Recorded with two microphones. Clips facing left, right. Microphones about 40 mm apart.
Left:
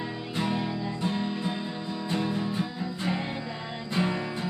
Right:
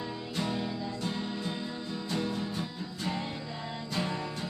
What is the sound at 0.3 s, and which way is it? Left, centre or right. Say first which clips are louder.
Music: left 4 dB; left.